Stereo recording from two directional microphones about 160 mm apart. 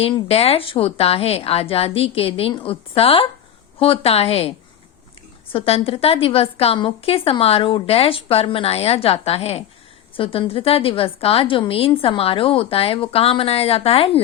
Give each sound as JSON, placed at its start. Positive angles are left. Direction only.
{"t": 0.0, "sound": "a woman's voice", "side_deg": 40}